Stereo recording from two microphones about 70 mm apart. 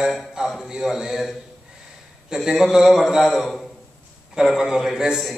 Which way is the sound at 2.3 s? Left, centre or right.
Centre.